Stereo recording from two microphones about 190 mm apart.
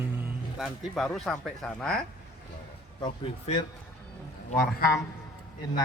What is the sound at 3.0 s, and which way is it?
Speech, 30° left (ahead or behind).